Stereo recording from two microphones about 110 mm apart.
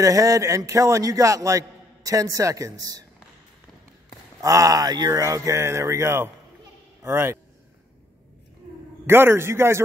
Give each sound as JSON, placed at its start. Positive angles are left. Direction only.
{"t": 0.0, "sound": "a man's voice", "side_deg": -30}
{"t": 4.4, "sound": "speech", "side_deg": -30}
{"t": 9.0, "sound": "speech", "side_deg": -20}